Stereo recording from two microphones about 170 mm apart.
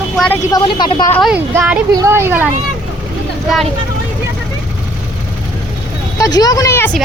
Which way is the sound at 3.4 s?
Centre (ahead or behind).